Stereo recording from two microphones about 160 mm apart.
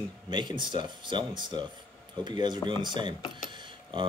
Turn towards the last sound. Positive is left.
turn(degrees=-30)  # may be behind; listen again after turning